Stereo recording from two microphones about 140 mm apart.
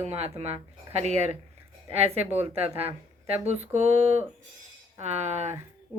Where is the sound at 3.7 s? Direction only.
55° right (ahead or behind).